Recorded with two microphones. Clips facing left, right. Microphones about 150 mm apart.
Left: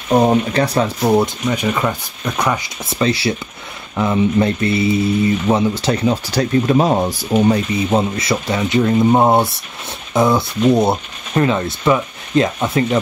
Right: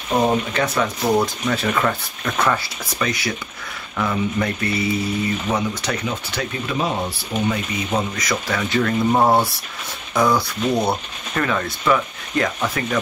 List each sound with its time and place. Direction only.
0.1 s speech: 35° left (ahead or behind); by 3.0 s 15° left (ahead or behind)
3.0 s speech: 30° left (ahead or behind)